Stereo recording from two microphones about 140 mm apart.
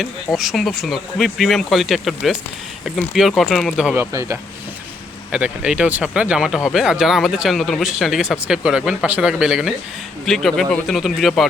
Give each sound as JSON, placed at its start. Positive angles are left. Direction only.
{"t": 0.0, "sound": "speech", "side_deg": 0}
{"t": 3.8, "sound": "speech", "side_deg": -15}
{"t": 5.3, "sound": "speech", "side_deg": -10}